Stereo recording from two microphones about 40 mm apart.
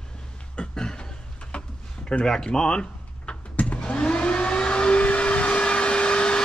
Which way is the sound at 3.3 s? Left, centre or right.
Centre.